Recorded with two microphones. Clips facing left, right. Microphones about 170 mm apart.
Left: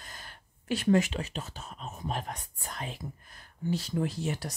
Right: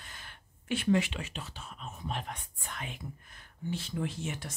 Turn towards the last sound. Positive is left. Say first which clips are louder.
# left 4 dB
turn(degrees=35)  # may be behind; listen again after turning